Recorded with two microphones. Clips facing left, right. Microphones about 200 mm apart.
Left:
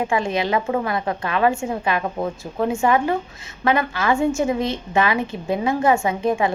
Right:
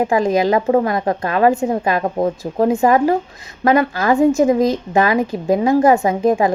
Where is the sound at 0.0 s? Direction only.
40° right (ahead or behind).